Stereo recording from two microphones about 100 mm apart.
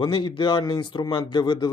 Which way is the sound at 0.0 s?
50° left (ahead or behind).